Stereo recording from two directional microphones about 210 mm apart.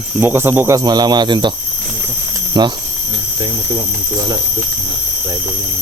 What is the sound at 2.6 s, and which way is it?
Speech, 20° right (ahead or behind).